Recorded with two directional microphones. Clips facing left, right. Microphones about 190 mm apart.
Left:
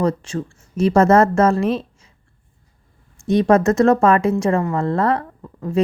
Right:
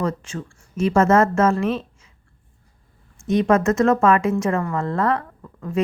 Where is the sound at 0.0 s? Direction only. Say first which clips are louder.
Left 5 dB; 35° left (ahead or behind).